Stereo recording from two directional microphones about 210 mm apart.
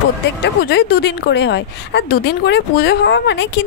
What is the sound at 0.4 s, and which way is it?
Speech, 50° left (ahead or behind).